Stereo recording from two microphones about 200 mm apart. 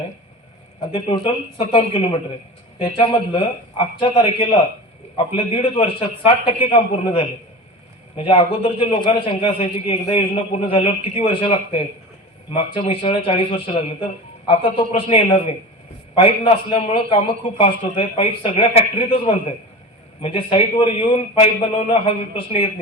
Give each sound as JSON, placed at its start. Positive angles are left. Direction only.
{"t": 0.9, "sound": "a man's voice", "side_deg": 25}